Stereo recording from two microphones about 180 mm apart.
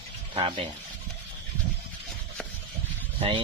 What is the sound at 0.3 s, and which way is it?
Speech, 30° right (ahead or behind).